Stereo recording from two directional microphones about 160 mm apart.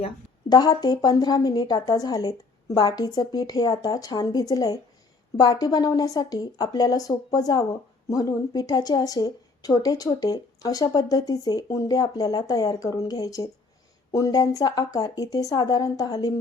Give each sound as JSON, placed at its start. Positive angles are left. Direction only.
{"t": 0.4, "sound": "speech", "side_deg": 25}